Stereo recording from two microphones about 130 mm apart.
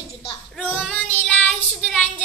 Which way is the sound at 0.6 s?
10° left (ahead or behind).